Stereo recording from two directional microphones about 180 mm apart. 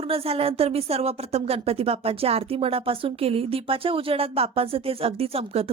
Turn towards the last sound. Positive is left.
turn(degrees=-35)  # may be behind; listen again after turning